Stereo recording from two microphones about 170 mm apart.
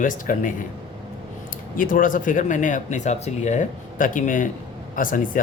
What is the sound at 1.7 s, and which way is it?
Speech, 55° left (ahead or behind).